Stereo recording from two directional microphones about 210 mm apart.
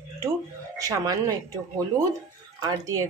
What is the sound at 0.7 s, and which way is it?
Speech, 15° right (ahead or behind).